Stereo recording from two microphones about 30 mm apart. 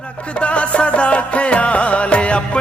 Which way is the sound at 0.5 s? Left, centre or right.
Left.